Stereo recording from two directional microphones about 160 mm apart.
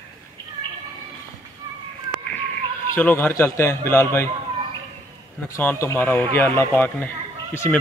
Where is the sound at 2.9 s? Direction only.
10° left (ahead or behind).